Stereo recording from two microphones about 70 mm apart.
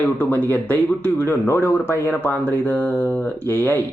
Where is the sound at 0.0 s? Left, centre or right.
Left.